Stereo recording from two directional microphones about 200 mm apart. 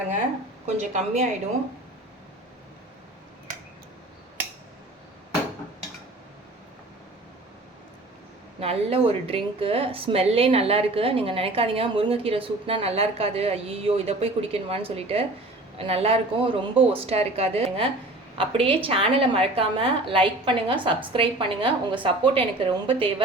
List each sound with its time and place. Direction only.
0.8 s a woman's voice: 35° right (ahead or behind)
8.6 s a woman's voice: 30° right (ahead or behind)